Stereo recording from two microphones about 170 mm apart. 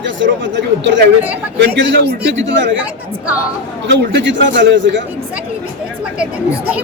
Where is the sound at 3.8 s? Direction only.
90° right.